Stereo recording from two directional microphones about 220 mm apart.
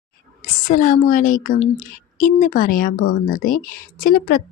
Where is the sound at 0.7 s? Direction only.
35° left (ahead or behind).